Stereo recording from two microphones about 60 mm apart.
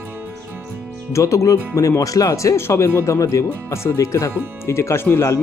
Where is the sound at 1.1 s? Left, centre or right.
Left.